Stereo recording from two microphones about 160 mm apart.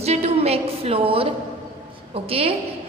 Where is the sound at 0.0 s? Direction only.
40° right (ahead or behind).